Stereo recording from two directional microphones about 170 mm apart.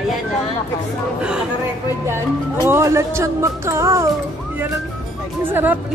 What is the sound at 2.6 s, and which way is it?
Speech, 15° right (ahead or behind).